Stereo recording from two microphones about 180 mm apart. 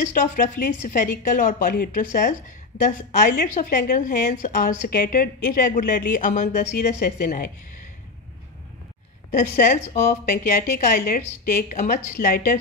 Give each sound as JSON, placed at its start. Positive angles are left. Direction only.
{"t": 0.0, "sound": "a woman's voice", "side_deg": 45}
{"t": 9.3, "sound": "a woman's voice", "side_deg": 45}